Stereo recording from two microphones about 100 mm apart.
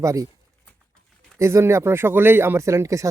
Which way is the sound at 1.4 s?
25° right (ahead or behind).